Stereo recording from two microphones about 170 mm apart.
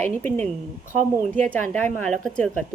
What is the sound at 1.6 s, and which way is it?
Speech, 45° right (ahead or behind).